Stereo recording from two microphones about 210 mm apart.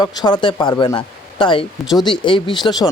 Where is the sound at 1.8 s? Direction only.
Centre (ahead or behind).